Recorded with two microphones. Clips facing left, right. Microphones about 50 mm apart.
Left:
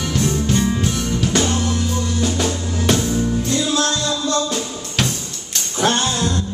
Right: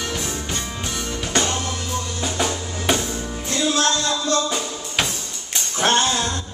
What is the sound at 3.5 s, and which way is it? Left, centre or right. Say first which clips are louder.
Music: right 4 dB; right.